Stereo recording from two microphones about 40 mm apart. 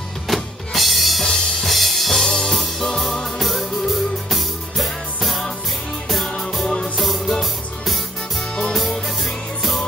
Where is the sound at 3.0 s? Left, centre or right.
Centre.